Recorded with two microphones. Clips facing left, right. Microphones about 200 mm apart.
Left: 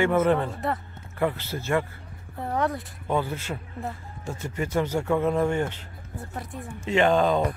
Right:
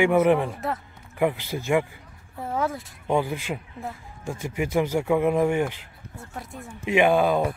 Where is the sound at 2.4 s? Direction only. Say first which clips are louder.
Left 1 dB; centre (ahead or behind).